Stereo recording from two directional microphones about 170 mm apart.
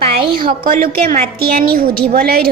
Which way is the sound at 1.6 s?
65° right (ahead or behind).